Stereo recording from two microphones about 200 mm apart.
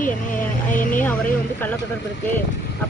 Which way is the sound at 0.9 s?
10° left (ahead or behind).